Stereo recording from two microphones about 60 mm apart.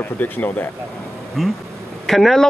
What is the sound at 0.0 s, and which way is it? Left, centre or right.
Speech, left.